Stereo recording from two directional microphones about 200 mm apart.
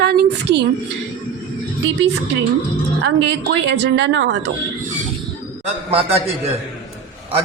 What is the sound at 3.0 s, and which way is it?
A man's voice, 60° right (ahead or behind).